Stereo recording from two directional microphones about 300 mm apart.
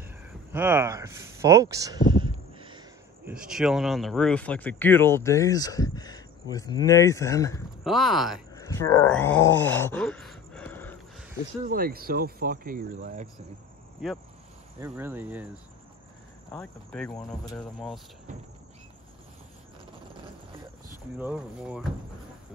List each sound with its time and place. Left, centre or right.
0.5 s speech: centre
3.3 s speech: centre
7.8 s speech: centre
8.5 s a sound: centre
11.6 s speech: right
14.0 s speech: centre
16.5 s speech: centre
21.2 s speech: centre